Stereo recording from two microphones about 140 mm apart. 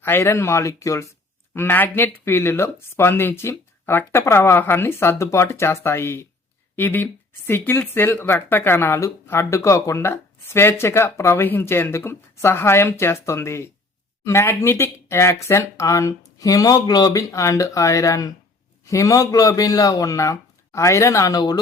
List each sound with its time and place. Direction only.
0.0 s speech: 15° left (ahead or behind)